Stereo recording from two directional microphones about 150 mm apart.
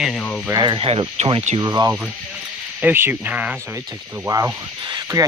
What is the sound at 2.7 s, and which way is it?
Speech, 10° right (ahead or behind).